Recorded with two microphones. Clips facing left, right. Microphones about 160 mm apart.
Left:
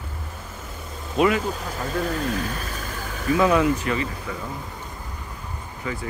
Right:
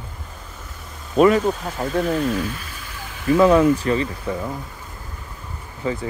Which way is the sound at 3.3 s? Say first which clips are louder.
Right 5 dB; 40° right (ahead or behind).